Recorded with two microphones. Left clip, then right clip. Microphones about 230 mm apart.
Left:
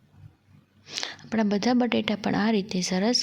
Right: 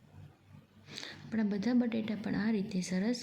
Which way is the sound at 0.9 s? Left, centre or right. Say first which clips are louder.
Left 11 dB; left.